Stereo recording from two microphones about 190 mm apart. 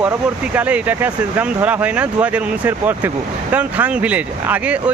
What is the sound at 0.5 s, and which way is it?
Speech, 5° right (ahead or behind).